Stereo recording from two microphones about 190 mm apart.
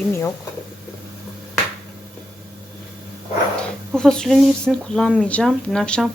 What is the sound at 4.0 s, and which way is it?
Speech, 5° left (ahead or behind).